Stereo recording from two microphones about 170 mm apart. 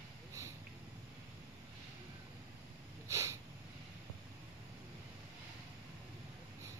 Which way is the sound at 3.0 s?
20° right (ahead or behind).